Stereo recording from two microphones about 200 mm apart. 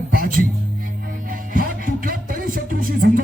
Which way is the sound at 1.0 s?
45° right (ahead or behind).